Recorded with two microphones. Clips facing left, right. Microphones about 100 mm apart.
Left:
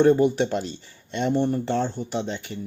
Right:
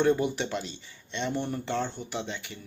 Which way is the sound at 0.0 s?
35° left (ahead or behind).